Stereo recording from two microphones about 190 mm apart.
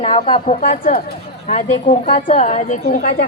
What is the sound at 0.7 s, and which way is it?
Speech, 50° left (ahead or behind).